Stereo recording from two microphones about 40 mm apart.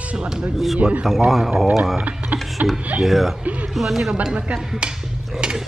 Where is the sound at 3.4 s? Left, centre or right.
Right.